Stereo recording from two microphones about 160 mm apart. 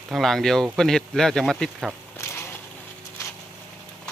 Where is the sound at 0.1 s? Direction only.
Centre (ahead or behind).